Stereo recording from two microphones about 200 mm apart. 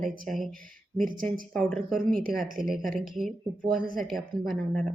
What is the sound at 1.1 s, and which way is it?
Speech, 45° right (ahead or behind).